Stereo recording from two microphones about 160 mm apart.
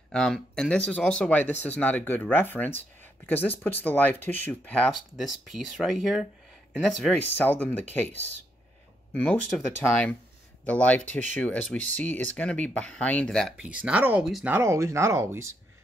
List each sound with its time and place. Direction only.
0.1 s speech: 5° left (ahead or behind)
7.1 s speech: 10° left (ahead or behind)
9.1 s speech: 10° left (ahead or behind)
10.6 s speech: 10° left (ahead or behind)
13.6 s speech: 5° right (ahead or behind)
14.5 s speech: 15° right (ahead or behind)